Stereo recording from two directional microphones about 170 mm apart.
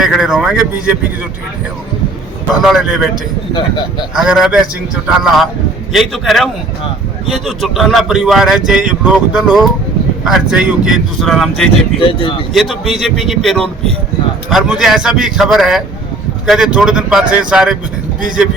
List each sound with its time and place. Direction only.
0.0 s speech: 5° right (ahead or behind)
2.6 s speech: centre (ahead or behind)
4.1 s speech: 5° right (ahead or behind)
11.9 s speech: 30° left (ahead or behind)
12.5 s speech: centre (ahead or behind)